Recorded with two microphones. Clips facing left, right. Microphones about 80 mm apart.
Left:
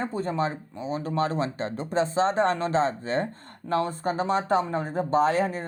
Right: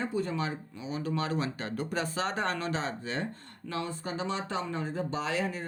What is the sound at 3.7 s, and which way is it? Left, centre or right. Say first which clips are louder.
Speech: left 9 dB; left.